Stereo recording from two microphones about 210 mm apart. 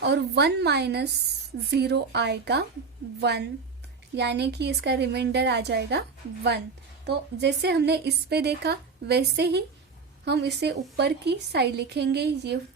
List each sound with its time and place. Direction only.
0.0 s a woman's voice: 55° right (ahead or behind)